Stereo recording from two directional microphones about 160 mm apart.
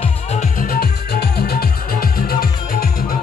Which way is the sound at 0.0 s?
40° left (ahead or behind).